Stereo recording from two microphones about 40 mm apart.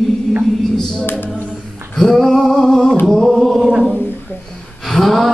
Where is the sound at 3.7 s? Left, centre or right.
Right.